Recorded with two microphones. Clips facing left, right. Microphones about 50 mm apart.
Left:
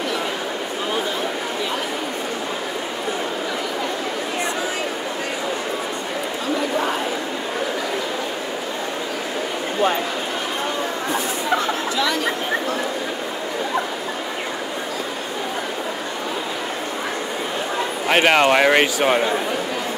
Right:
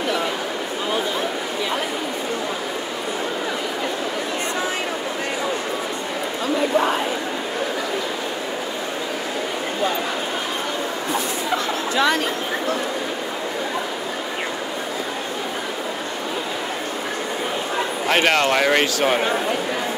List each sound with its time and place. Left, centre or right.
18.0 s a man's voice: centre